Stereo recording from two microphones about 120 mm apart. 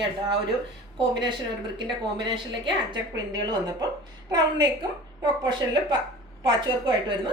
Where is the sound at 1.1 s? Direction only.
40° right (ahead or behind).